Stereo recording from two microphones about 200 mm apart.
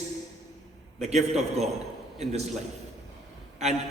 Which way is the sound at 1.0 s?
35° right (ahead or behind).